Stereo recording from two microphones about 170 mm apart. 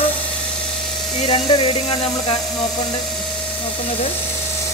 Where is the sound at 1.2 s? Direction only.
35° left (ahead or behind).